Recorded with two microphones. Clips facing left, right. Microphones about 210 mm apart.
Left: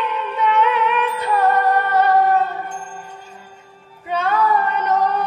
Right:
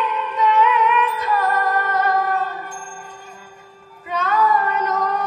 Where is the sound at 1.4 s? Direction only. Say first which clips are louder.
Left 7 dB; 65° left (ahead or behind).